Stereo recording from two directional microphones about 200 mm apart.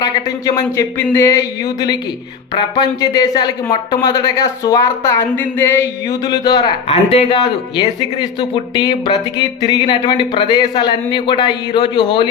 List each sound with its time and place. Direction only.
0.0 s speech: 20° left (ahead or behind)